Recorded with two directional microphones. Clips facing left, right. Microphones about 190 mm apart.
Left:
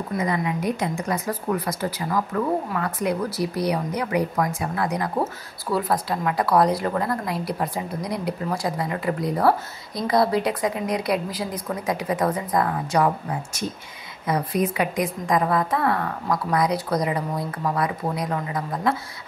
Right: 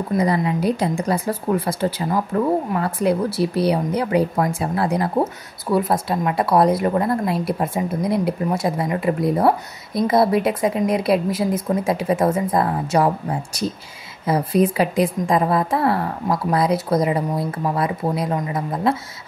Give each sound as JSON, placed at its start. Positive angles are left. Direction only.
{"t": 0.2, "sound": "speech", "side_deg": -35}